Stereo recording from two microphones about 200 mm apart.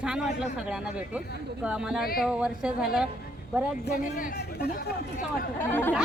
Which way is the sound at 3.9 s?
45° left (ahead or behind).